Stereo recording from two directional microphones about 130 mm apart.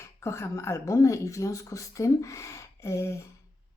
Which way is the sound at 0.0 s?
20° left (ahead or behind).